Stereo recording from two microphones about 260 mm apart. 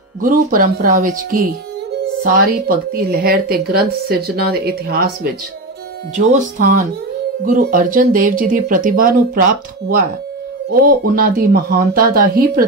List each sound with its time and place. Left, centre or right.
0.2 s a woman's voice: right
2.2 s a woman's voice: right